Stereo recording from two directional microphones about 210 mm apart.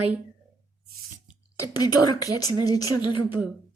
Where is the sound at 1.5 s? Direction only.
15° left (ahead or behind).